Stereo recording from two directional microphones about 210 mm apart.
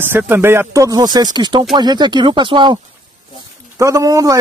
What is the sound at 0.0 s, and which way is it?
A man's voice, 10° right (ahead or behind).